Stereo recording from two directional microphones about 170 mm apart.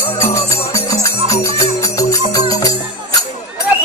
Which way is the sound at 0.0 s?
15° left (ahead or behind).